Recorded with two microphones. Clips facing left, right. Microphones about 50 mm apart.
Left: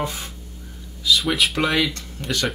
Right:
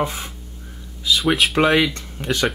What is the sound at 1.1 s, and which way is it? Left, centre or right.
Speech, centre.